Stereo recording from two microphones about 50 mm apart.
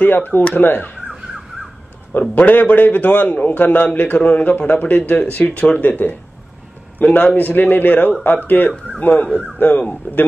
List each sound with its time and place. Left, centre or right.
0.0 s speech: left
2.1 s speech: left
5.9 s speech: left